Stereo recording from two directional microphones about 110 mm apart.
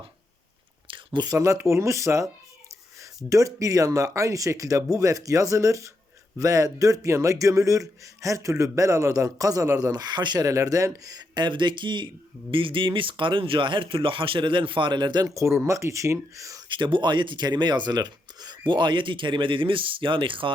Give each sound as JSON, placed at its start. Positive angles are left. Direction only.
{"t": 0.9, "sound": "a sound", "side_deg": -45}
{"t": 1.4, "sound": "a man's voice", "side_deg": -25}
{"t": 15.4, "sound": "speech", "side_deg": -25}
{"t": 16.6, "sound": "speech", "side_deg": -45}